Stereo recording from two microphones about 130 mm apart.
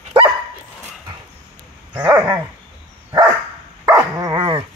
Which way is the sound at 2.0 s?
20° right (ahead or behind).